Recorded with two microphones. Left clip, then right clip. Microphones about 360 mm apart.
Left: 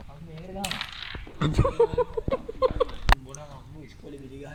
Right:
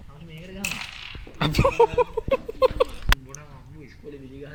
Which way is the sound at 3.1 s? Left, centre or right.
Left.